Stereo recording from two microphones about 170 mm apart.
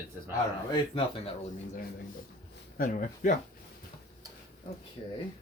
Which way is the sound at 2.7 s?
50° left (ahead or behind).